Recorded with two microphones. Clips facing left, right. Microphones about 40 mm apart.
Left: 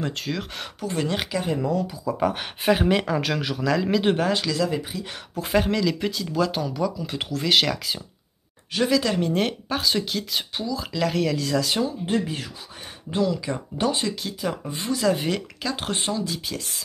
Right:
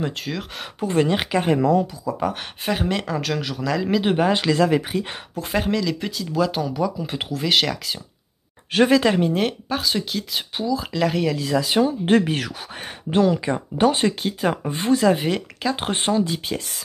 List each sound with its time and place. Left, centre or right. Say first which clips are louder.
0.0 s speech: right 1 dB; centre
0.7 s speech: right 6 dB; right
1.3 s speech: right 8 dB; right
2.2 s speech: left 4 dB; centre
4.3 s speech: right 5 dB; right
4.6 s speech: right 7 dB; right
5.3 s speech: left 1 dB; centre
8.7 s speech: right 5 dB; right
9.3 s speech: right 2 dB; centre
12.1 s speech: right 7 dB; right
13.1 s speech: right 5 dB; right
15.1 s speech: right 3 dB; centre
15.9 s speech: right 6 dB; right